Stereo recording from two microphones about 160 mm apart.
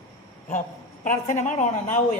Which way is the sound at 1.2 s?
50° left (ahead or behind).